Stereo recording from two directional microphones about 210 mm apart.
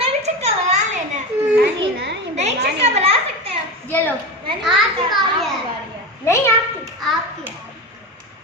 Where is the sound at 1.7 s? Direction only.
55° right (ahead or behind).